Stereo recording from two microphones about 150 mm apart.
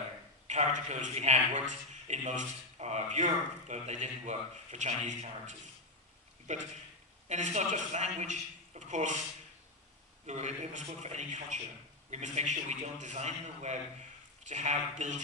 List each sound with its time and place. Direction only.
0.5 s a man's voice: 50° right (ahead or behind)
10.2 s a man's voice: 50° right (ahead or behind)